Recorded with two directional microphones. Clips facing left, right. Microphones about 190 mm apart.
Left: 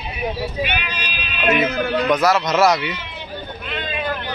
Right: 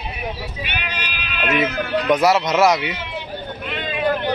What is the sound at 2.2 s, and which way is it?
Speech, 25° right (ahead or behind).